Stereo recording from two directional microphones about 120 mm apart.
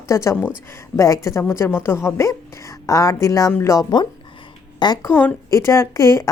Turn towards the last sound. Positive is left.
turn(degrees=25)  # may be behind; listen again after turning